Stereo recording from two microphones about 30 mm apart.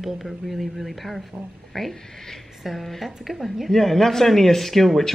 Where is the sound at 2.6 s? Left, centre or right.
Centre.